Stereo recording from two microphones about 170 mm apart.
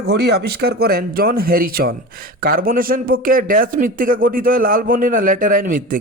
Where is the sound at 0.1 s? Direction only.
70° right (ahead or behind).